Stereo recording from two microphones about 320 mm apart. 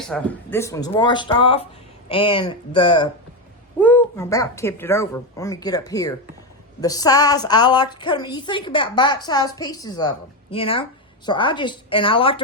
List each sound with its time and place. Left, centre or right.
0.0 s a woman's voice: centre